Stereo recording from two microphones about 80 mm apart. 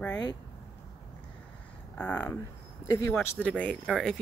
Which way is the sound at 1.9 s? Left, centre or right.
Centre.